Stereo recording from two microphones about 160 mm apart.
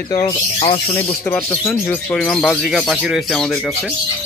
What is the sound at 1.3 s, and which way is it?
Speech, 15° left (ahead or behind).